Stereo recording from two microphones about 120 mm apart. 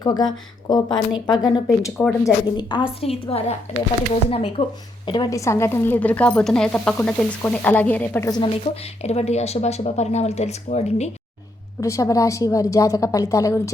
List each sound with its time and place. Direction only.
0.0 s a woman's voice: 35° left (ahead or behind)
1.5 s speech: centre (ahead or behind)
2.0 s a woman's voice: 10° left (ahead or behind)
2.6 s a woman's voice: 40° left (ahead or behind)
3.0 s speech: 55° left (ahead or behind)
5.0 s a woman's voice: 40° left (ahead or behind)
5.3 s a woman's voice: 25° left (ahead or behind)
8.7 s speech: 60° left (ahead or behind)
11.8 s a woman's voice: 25° left (ahead or behind)